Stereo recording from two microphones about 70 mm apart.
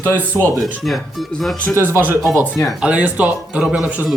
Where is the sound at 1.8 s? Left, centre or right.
Right.